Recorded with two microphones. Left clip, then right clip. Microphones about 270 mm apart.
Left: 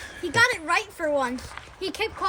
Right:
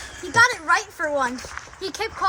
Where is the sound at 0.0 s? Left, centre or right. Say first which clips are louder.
Right 4 dB; centre.